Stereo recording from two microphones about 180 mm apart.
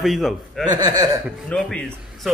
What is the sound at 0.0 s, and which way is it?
Speech, centre (ahead or behind).